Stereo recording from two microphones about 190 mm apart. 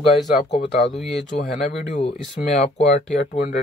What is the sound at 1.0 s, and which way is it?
Speech, centre (ahead or behind).